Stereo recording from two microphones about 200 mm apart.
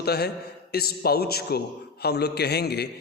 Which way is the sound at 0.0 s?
55° left (ahead or behind).